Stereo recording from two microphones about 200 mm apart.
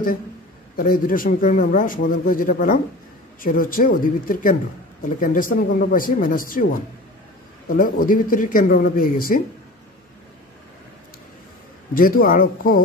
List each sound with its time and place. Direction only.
0.7 s a man's voice: 45° left (ahead or behind)
7.6 s a man's voice: 45° left (ahead or behind)
11.9 s a man's voice: 45° left (ahead or behind)